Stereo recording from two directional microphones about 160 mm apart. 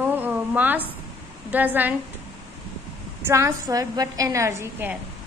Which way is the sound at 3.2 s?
15° right (ahead or behind).